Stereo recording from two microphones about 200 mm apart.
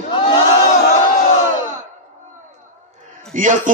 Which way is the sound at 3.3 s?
40° right (ahead or behind).